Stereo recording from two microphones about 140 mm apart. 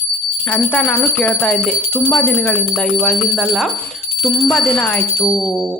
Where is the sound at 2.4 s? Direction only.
5° left (ahead or behind).